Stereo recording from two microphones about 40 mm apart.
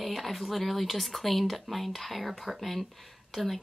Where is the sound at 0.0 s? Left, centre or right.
Centre.